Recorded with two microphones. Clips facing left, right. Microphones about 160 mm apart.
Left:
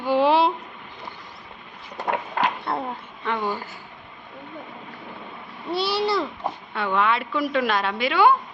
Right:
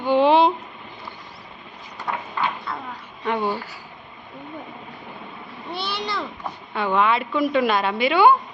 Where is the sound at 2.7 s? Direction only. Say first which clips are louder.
Left 5 dB; 65° left (ahead or behind).